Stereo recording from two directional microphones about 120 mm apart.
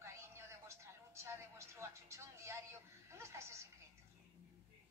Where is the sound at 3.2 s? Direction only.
25° right (ahead or behind).